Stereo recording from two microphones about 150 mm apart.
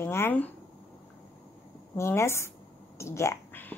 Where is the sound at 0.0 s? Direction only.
15° left (ahead or behind).